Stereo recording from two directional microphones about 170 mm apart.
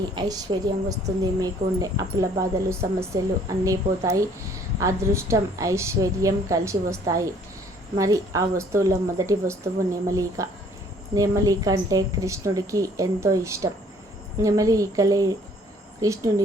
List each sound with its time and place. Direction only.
0.2 s speech: 25° right (ahead or behind)